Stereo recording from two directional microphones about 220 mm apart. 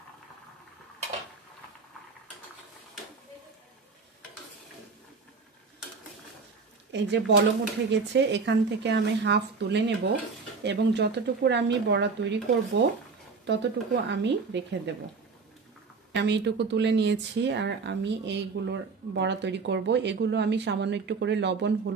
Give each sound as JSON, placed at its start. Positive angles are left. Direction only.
{"t": 6.9, "sound": "speech", "side_deg": -50}
{"t": 16.1, "sound": "speech", "side_deg": -50}